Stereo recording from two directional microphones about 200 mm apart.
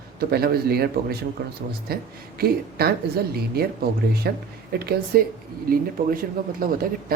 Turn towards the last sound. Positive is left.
turn(degrees=-45)  # may be behind; listen again after turning